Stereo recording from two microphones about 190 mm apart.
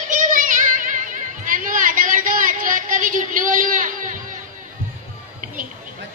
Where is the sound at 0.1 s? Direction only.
45° right (ahead or behind).